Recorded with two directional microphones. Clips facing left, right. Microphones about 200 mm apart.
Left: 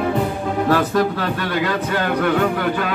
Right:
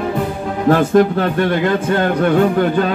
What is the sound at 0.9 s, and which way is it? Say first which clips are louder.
Speech: right 7 dB; 50° right (ahead or behind).